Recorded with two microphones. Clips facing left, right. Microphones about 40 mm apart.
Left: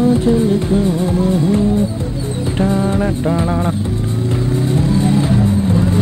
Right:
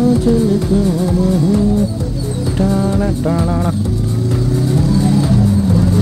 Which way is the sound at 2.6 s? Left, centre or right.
Left.